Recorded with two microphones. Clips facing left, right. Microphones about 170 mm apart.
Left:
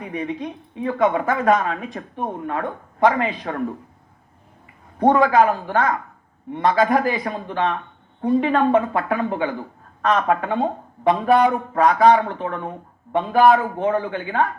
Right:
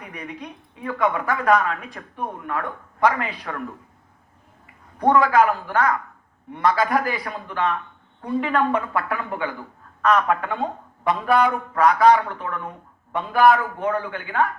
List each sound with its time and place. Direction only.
0.0 s speech: 25° left (ahead or behind)
4.9 s speech: 25° left (ahead or behind)